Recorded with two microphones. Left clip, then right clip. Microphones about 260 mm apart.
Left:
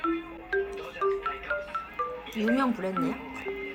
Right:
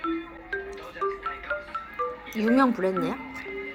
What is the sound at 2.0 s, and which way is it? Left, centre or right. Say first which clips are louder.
Music: right 3 dB; centre.